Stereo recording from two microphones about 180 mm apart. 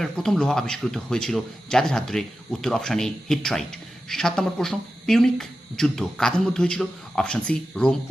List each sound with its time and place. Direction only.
0.0 s speech: centre (ahead or behind)